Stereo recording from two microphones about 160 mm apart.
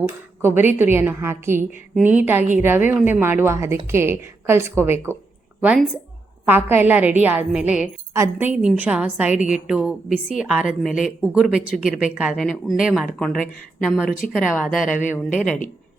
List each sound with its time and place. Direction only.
0.4 s a woman's voice: 10° right (ahead or behind)
14.8 s speech: 55° left (ahead or behind)